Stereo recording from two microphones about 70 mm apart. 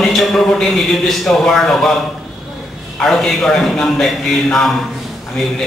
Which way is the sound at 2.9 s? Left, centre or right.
Centre.